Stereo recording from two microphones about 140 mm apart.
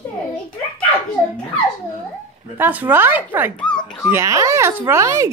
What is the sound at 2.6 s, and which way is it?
Speech, 15° right (ahead or behind).